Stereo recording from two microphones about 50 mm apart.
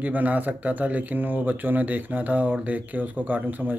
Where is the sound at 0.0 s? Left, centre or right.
Right.